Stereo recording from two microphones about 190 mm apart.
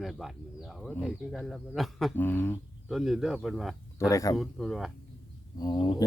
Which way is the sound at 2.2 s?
10° left (ahead or behind).